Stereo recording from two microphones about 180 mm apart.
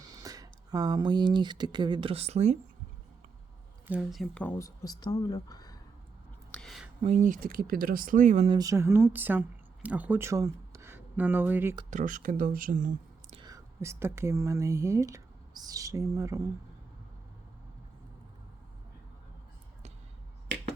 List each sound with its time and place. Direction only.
0.0 s speech: 20° right (ahead or behind); by 2.6 s 40° right (ahead or behind)
3.8 s speech: 5° right (ahead or behind); by 5.7 s 20° left (ahead or behind)
6.5 s whispering: 5° left (ahead or behind)
7.0 s speech: 40° right (ahead or behind)
8.4 s speech: 20° right (ahead or behind)
11.9 s speech: 45° right (ahead or behind)
13.3 s speech: 20° right (ahead or behind)